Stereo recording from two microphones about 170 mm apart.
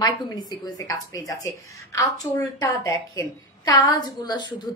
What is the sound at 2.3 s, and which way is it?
A woman's voice, 20° left (ahead or behind).